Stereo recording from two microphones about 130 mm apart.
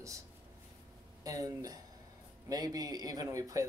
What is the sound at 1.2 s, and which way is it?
Speech, 25° right (ahead or behind).